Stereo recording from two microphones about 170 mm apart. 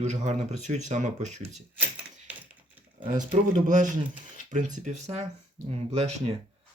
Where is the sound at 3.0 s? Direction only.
30° right (ahead or behind).